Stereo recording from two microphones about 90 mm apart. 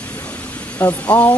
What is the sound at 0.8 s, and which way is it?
Speech, 20° left (ahead or behind).